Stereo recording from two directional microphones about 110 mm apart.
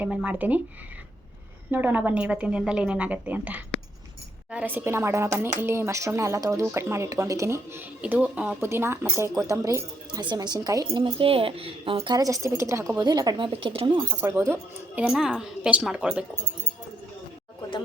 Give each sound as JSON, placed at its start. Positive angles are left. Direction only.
{"t": 0.0, "sound": "a woman's voice", "side_deg": -10}
{"t": 1.7, "sound": "a woman's voice", "side_deg": -15}
{"t": 8.0, "sound": "a woman's voice", "side_deg": -15}
{"t": 11.0, "sound": "speech", "side_deg": -55}
{"t": 12.1, "sound": "speech", "side_deg": -30}
{"t": 13.0, "sound": "a woman's voice", "side_deg": -35}
{"t": 13.3, "sound": "speech", "side_deg": -50}
{"t": 14.2, "sound": "a woman's voice", "side_deg": -25}